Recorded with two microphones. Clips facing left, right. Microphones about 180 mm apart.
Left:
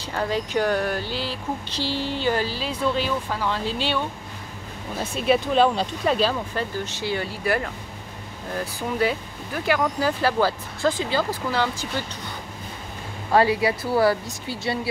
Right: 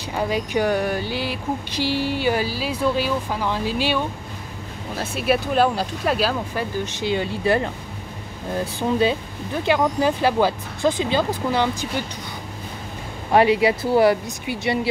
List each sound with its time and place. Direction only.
0.1 s a sound: 10° right (ahead or behind)
8.5 s speech: 25° right (ahead or behind)
13.3 s speech: 20° right (ahead or behind)